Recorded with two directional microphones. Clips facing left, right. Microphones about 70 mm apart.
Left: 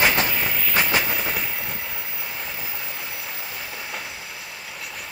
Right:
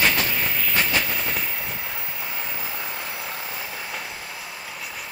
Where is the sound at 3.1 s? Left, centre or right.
Right.